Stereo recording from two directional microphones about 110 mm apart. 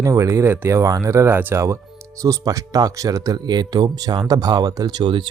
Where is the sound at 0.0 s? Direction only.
30° right (ahead or behind).